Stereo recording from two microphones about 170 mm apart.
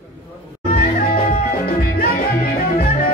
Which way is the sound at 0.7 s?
50° left (ahead or behind).